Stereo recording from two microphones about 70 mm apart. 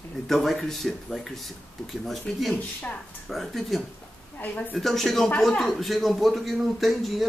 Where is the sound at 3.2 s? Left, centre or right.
Centre.